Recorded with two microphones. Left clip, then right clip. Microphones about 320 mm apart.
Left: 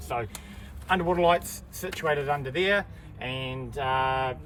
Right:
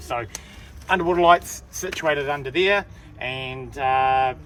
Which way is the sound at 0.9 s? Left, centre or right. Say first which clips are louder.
Right 6 dB; right.